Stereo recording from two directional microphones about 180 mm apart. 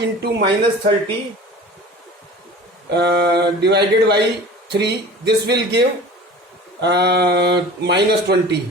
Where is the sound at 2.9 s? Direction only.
70° right (ahead or behind).